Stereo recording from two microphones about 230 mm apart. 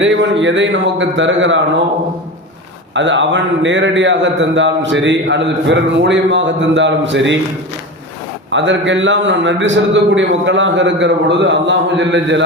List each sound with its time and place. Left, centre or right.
0.0 s speech: right
2.9 s a man's voice: right
8.4 s a man's voice: right